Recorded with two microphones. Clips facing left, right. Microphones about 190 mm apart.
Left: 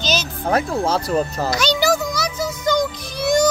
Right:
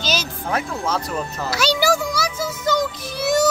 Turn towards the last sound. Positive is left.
turn(degrees=-5)  # may be behind; listen again after turning